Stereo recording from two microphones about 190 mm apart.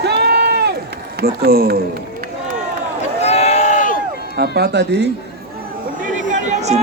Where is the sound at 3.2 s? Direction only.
35° left (ahead or behind); by 4.3 s 50° left (ahead or behind).